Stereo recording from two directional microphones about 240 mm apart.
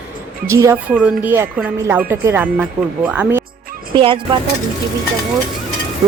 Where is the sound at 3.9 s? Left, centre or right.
Right.